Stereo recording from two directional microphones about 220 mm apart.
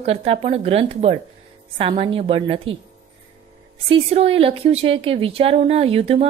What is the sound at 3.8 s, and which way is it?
Speech, 25° right (ahead or behind).